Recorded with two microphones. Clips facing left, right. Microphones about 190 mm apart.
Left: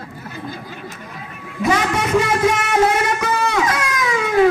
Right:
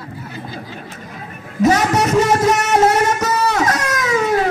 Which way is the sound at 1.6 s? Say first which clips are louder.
Right 4 dB; 40° right (ahead or behind).